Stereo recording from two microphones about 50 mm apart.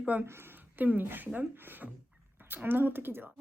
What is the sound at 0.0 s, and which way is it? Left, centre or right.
Speech, right.